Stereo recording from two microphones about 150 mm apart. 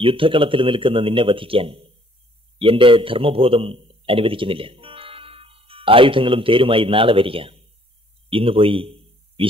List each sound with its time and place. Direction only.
0.0 s a man's voice: 35° right (ahead or behind)